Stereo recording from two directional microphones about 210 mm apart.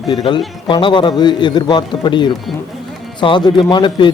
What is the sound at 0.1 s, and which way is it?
A man's voice, 20° left (ahead or behind).